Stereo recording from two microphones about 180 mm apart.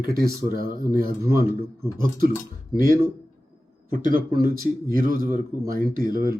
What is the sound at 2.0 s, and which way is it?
Speech, 50° right (ahead or behind).